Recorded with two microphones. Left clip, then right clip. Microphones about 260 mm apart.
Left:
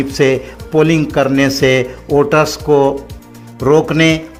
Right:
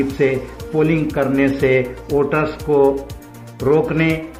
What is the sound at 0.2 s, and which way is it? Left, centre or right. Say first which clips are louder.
A man's voice: left 7 dB; left.